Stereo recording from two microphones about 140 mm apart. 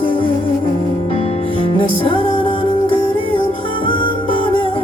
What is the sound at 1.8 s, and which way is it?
Music, 40° left (ahead or behind).